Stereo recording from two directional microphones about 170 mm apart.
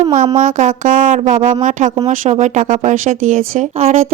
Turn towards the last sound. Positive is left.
turn(degrees=-40)  # may be behind; listen again after turning